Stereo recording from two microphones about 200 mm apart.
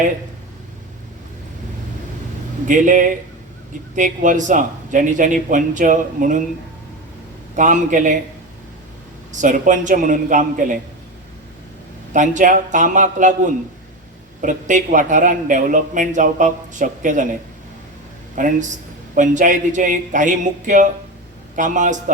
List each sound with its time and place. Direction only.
2.6 s a man's voice: 40° right (ahead or behind)
7.5 s a man's voice: 40° right (ahead or behind)
9.3 s a man's voice: 40° right (ahead or behind)
12.1 s a man's voice: 40° right (ahead or behind)
14.4 s a man's voice: 40° right (ahead or behind)
18.3 s a man's voice: 40° right (ahead or behind)